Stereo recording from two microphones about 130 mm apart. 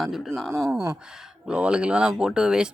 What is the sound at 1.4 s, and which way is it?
Speech, 10° right (ahead or behind).